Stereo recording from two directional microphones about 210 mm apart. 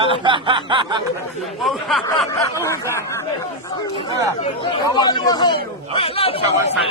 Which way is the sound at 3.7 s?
20° left (ahead or behind).